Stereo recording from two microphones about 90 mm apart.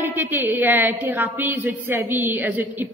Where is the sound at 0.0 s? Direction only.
25° right (ahead or behind).